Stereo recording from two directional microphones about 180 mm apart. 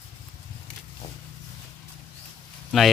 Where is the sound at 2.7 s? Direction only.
Centre (ahead or behind).